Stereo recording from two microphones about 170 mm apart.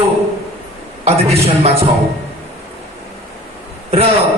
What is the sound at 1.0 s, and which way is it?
Speech, 35° right (ahead or behind).